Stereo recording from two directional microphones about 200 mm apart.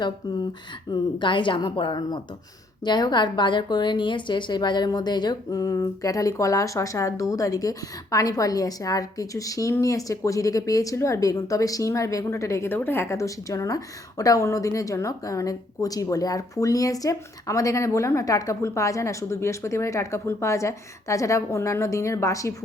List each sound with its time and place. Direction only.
0.9 s a woman's voice: 20° left (ahead or behind)